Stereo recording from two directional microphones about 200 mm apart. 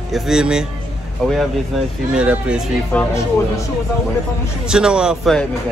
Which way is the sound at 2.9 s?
5° left (ahead or behind).